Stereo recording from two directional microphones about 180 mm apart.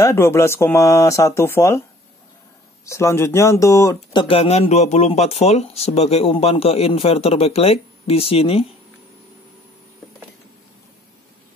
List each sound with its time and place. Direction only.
0.0 s speech: 15° left (ahead or behind)
2.8 s speech: 15° left (ahead or behind); by 8.6 s 35° left (ahead or behind)